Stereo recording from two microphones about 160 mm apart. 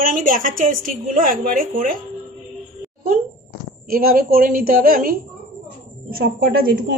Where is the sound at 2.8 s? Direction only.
65° right (ahead or behind).